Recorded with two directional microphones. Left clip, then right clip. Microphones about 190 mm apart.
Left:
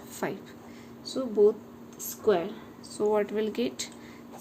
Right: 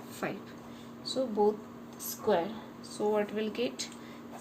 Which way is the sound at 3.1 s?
55° left (ahead or behind).